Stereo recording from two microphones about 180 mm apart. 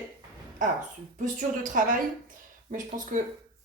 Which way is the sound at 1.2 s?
45° right (ahead or behind).